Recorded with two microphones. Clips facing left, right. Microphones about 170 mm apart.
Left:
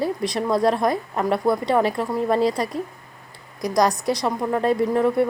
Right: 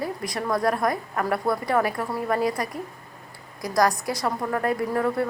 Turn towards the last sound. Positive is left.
turn(degrees=20)  # may be behind; listen again after turning